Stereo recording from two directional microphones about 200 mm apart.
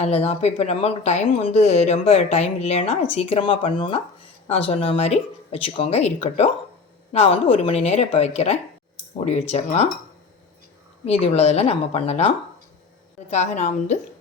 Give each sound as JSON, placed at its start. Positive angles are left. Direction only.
{"t": 0.0, "sound": "speech", "side_deg": 30}
{"t": 11.0, "sound": "speech", "side_deg": 30}